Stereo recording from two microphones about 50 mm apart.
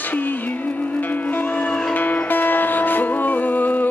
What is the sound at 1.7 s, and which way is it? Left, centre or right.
Music, centre.